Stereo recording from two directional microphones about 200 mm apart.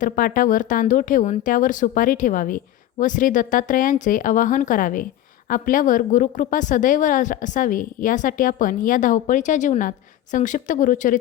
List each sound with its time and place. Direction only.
0.0 s speech: 45° left (ahead or behind)